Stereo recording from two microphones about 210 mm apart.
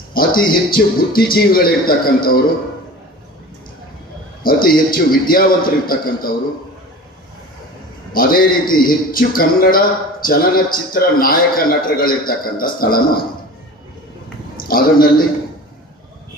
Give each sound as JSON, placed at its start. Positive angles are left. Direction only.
{"t": 0.1, "sound": "a man's voice", "side_deg": 45}
{"t": 4.4, "sound": "a man's voice", "side_deg": 45}
{"t": 8.1, "sound": "a man's voice", "side_deg": 45}
{"t": 14.7, "sound": "a man's voice", "side_deg": 45}